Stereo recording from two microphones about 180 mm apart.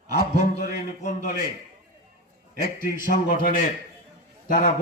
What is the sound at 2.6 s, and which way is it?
A man's voice, 60° left (ahead or behind).